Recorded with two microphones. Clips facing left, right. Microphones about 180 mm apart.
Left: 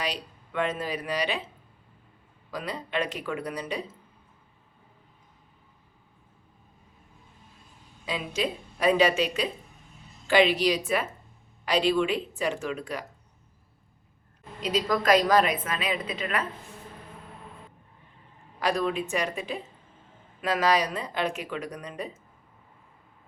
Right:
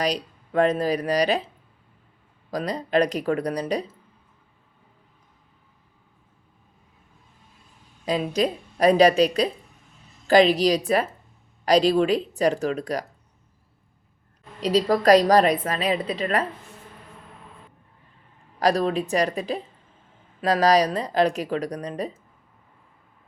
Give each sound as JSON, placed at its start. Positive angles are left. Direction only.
{"t": 0.0, "sound": "a woman's voice", "side_deg": -40}
{"t": 2.5, "sound": "a woman's voice", "side_deg": -40}
{"t": 8.0, "sound": "a woman's voice", "side_deg": -40}
{"t": 14.6, "sound": "a woman's voice", "side_deg": -35}
{"t": 18.6, "sound": "a woman's voice", "side_deg": -35}